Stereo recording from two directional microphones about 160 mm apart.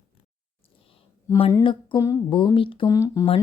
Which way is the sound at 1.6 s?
30° left (ahead or behind).